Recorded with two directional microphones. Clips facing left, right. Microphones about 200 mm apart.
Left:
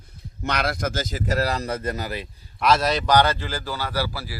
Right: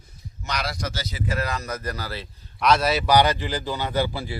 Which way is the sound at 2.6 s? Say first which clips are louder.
Even; centre (ahead or behind).